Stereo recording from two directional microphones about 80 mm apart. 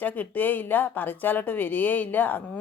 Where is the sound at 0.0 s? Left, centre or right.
Left.